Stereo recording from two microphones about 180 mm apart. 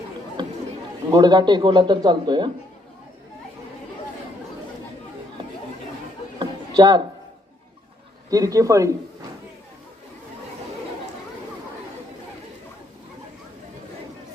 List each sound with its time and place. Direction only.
0.4 s chatter: 25° right (ahead or behind)
1.1 s a man's voice: 25° right (ahead or behind)
6.4 s a sound: 25° right (ahead or behind)
8.3 s a man's voice: 20° right (ahead or behind)